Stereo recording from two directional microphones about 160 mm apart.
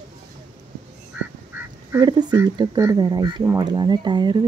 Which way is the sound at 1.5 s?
10° right (ahead or behind).